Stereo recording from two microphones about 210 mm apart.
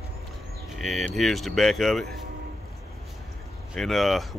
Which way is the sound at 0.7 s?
Centre (ahead or behind).